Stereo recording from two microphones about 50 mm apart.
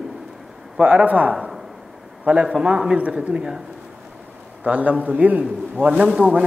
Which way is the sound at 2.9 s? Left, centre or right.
Right.